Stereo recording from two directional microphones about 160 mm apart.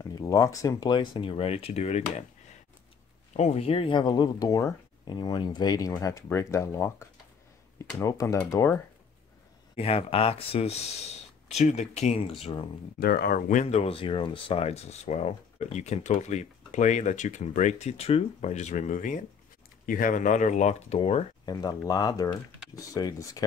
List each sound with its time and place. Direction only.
0.0 s speech: 20° left (ahead or behind); by 2.2 s 45° left (ahead or behind)
3.3 s speech: 40° left (ahead or behind); by 8.8 s 20° left (ahead or behind)
9.8 s speech: 35° left (ahead or behind)
13.0 s speech: 70° left (ahead or behind); by 13.7 s 50° left (ahead or behind)
13.7 s speech: 35° left (ahead or behind)
21.5 s speech: 25° left (ahead or behind)